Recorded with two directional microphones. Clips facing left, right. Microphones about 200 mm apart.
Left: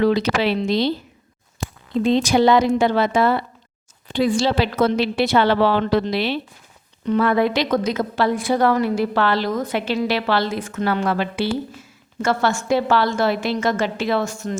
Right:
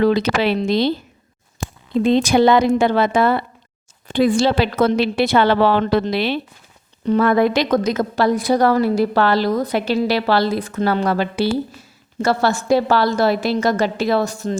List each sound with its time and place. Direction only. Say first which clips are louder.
0.0 s a woman's voice: right 2 dB; 50° right (ahead or behind)
2.0 s a woman's voice: right 2 dB; 55° right (ahead or behind)
7.0 s a woman's voice: right 3 dB; 40° right (ahead or behind)